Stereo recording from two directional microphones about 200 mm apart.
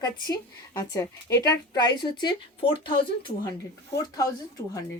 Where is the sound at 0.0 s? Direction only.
20° left (ahead or behind).